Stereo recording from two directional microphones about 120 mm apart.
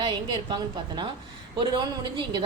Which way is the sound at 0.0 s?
45° right (ahead or behind).